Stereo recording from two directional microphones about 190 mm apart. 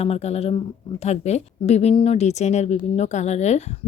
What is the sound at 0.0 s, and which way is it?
A woman's voice, 35° left (ahead or behind).